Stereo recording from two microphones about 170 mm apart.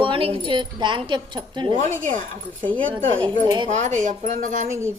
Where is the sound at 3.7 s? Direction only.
45° right (ahead or behind).